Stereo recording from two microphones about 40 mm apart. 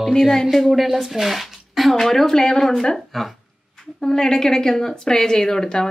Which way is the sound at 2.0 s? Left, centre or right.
Centre.